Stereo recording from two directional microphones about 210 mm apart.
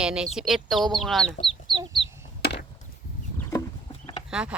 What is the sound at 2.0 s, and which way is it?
Chicken, 55° left (ahead or behind).